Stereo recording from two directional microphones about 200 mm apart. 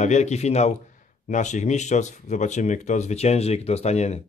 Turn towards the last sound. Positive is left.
turn(degrees=35)  # may be behind; listen again after turning